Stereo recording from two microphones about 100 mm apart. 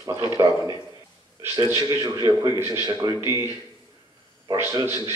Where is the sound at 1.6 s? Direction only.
30° right (ahead or behind).